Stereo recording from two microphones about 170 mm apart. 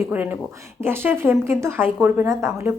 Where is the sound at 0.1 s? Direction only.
10° right (ahead or behind).